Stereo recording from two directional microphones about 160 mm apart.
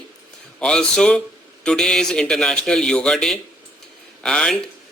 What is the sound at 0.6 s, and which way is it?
Speech, 5° left (ahead or behind).